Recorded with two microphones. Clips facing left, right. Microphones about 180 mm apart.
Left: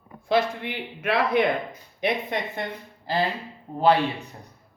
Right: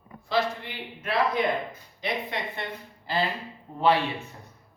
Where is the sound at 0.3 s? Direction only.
55° left (ahead or behind).